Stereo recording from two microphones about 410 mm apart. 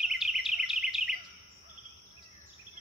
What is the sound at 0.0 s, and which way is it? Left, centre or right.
Bird vocalization, centre.